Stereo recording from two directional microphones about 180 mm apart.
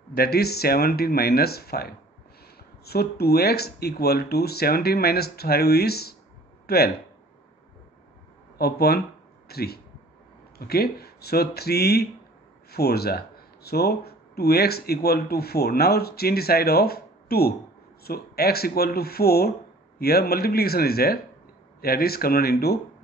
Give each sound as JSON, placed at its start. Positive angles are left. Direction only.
{"t": 0.1, "sound": "speech", "side_deg": 60}
{"t": 8.5, "sound": "speech", "side_deg": 60}